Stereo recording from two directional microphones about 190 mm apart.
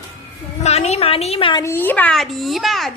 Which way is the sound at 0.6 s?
35° left (ahead or behind).